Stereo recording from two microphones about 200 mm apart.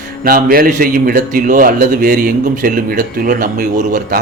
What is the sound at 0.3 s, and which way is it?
Speech, 45° right (ahead or behind).